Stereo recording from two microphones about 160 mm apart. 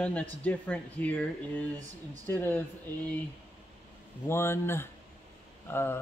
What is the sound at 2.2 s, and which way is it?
Speech, 15° left (ahead or behind).